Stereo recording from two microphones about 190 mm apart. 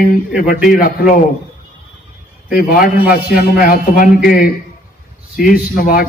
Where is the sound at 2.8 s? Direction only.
50° left (ahead or behind).